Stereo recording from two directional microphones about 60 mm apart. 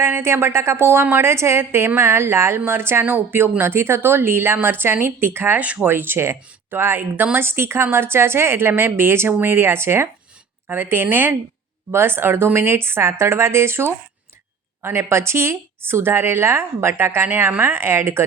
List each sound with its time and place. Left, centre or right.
0.0 s a woman's voice: right
5.5 s speech: right
5.9 s a woman's voice: right